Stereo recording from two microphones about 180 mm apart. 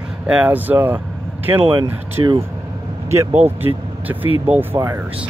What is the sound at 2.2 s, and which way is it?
Speech, 20° right (ahead or behind).